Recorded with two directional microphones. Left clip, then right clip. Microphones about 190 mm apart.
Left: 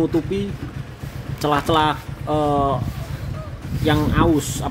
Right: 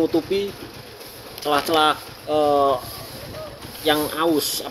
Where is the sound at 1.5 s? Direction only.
10° right (ahead or behind).